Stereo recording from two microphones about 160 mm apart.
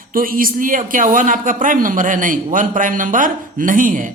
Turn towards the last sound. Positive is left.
turn(degrees=-55)  # may be behind; listen again after turning